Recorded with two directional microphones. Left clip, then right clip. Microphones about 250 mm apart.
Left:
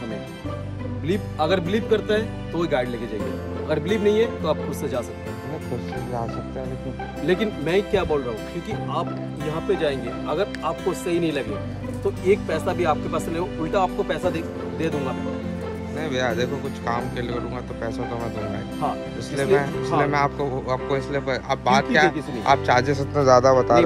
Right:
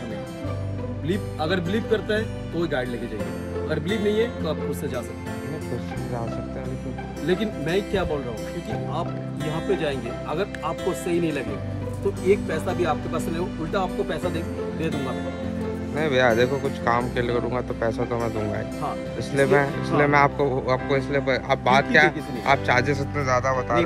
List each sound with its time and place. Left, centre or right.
1.0 s speech: left
7.2 s speech: left
9.5 s speech: centre
12.6 s speech: centre
16.0 s speech: centre
19.3 s speech: centre